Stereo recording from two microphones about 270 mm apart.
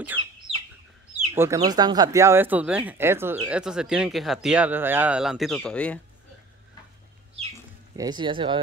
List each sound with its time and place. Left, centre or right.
1.3 s speech: centre
7.9 s speech: centre